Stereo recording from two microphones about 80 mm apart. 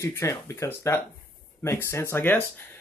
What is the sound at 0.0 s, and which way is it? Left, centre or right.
Speech, left.